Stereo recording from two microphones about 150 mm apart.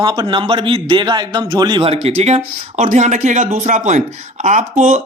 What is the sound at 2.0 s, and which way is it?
Speech, 45° right (ahead or behind).